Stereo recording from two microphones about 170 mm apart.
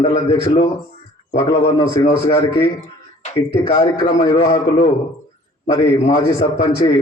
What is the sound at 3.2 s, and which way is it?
Speech, 45° left (ahead or behind).